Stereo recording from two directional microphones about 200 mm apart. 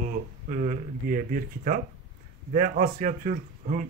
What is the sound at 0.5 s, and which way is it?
Speech, 40° right (ahead or behind).